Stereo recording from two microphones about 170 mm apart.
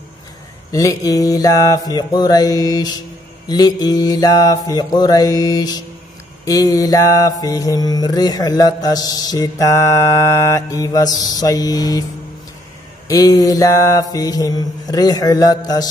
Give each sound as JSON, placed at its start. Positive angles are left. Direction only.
{"t": 0.7, "sound": "mantra", "side_deg": 20}
{"t": 13.1, "sound": "mantra", "side_deg": 20}